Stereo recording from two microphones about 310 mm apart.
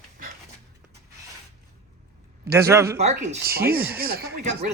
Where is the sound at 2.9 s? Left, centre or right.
Right.